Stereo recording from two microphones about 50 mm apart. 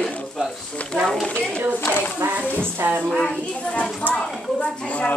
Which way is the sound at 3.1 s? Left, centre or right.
Centre.